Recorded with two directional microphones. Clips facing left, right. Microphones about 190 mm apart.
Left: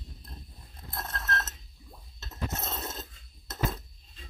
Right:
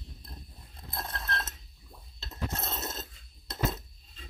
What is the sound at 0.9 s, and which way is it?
Clock, 15° right (ahead or behind).